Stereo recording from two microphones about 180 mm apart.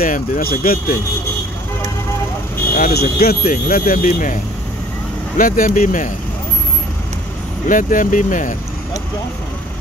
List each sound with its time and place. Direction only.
0.0 s speech: 55° left (ahead or behind)
2.7 s speech: 55° left (ahead or behind)
5.4 s speech: 50° left (ahead or behind)
7.6 s speech: 45° left (ahead or behind)